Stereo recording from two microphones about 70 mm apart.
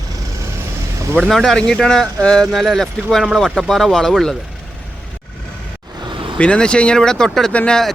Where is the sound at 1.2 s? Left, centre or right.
Centre.